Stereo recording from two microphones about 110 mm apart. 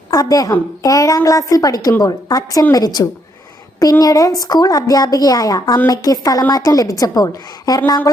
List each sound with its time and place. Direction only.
0.1 s a woman's voice: 35° left (ahead or behind)